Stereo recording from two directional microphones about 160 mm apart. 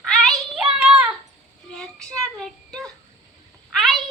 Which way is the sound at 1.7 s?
5° left (ahead or behind).